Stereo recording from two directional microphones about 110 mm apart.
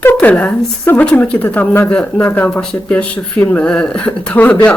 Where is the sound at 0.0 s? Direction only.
15° left (ahead or behind).